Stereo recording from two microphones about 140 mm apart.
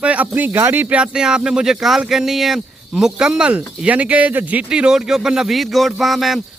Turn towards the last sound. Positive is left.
turn(degrees=0)  # may be behind; listen again after turning